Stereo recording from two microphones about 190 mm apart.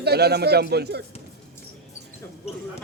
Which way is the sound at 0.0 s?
60° right (ahead or behind).